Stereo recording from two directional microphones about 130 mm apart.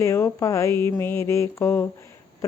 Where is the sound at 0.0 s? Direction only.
25° left (ahead or behind).